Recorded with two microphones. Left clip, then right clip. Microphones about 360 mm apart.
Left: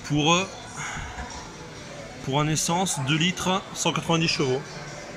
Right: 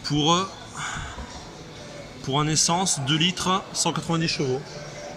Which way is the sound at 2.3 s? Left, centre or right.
Centre.